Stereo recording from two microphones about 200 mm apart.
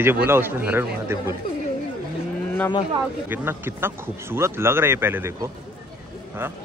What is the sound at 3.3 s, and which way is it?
Speech, 10° right (ahead or behind).